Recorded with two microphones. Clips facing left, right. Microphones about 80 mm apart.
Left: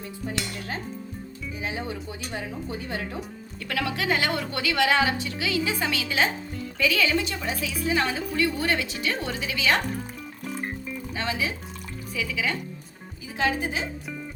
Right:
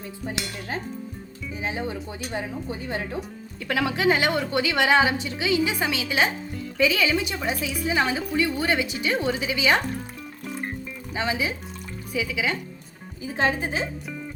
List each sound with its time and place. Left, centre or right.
1.6 s a woman's voice: right
11.1 s a woman's voice: centre
13.3 s speech: right